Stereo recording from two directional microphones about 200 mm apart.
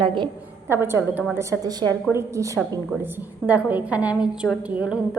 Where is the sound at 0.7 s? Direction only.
10° right (ahead or behind).